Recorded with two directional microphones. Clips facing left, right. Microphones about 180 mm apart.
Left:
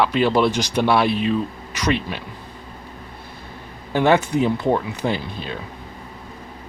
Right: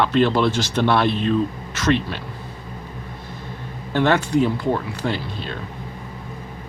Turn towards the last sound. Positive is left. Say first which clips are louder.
# left 1 dB
turn(degrees=15)  # may be behind; listen again after turning